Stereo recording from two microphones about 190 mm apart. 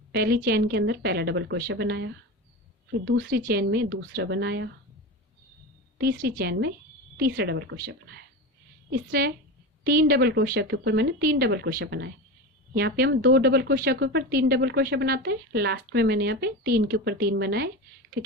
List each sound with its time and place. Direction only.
0.1 s speech: 55° right (ahead or behind)
6.0 s speech: 55° right (ahead or behind)
8.9 s speech: 55° right (ahead or behind)